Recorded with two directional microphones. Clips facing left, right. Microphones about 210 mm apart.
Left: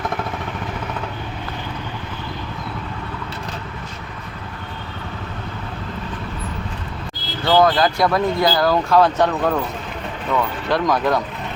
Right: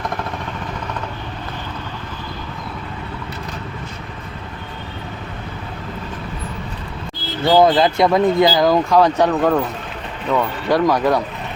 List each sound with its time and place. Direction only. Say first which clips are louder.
7.4 s speech: right 3 dB; 20° right (ahead or behind)
10.7 s speech: right 3 dB; 10° right (ahead or behind)